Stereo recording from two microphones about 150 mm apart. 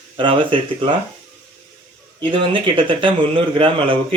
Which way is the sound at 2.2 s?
35° right (ahead or behind).